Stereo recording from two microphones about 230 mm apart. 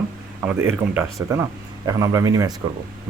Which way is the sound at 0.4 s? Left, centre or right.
Centre.